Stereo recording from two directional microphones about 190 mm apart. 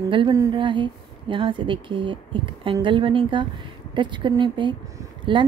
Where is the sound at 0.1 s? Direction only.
20° right (ahead or behind).